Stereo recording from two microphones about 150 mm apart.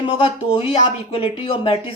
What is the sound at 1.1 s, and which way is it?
Speech, 40° left (ahead or behind).